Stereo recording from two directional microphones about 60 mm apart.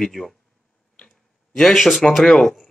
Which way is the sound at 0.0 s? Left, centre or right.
Centre.